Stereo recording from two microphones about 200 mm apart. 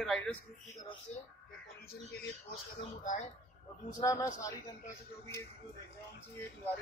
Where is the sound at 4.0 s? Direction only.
15° left (ahead or behind).